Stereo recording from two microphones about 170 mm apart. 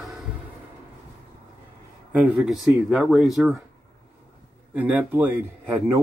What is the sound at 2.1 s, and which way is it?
Speech, 5° right (ahead or behind).